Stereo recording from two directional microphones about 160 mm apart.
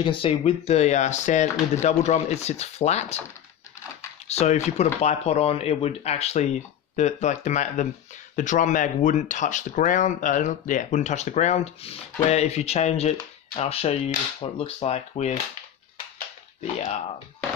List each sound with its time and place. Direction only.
0.0 s speech: 30° left (ahead or behind)
4.3 s speech: 45° left (ahead or behind)